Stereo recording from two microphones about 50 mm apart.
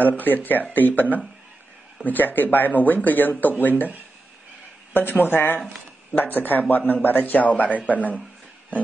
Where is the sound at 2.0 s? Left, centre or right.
Left.